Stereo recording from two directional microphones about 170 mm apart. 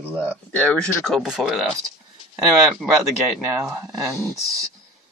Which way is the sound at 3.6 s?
20° right (ahead or behind).